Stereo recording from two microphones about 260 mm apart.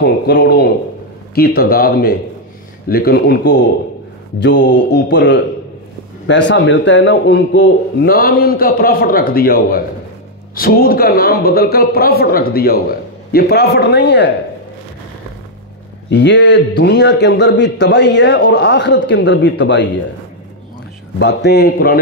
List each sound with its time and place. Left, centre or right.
0.0 s a man's voice: left
16.1 s a man's voice: left
21.2 s a man's voice: left